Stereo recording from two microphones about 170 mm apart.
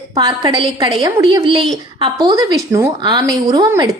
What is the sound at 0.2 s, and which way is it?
A woman's voice, 25° right (ahead or behind).